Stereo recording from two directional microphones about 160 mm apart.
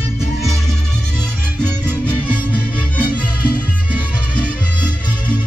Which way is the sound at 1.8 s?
10° left (ahead or behind).